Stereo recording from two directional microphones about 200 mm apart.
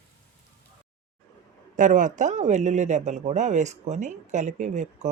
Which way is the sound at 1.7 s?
40° right (ahead or behind).